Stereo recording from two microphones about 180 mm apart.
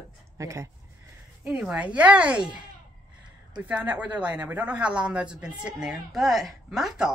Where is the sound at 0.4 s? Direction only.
15° right (ahead or behind).